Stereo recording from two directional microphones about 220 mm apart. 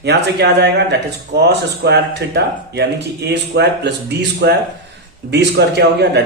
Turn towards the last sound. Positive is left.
turn(degrees=-50)  # may be behind; listen again after turning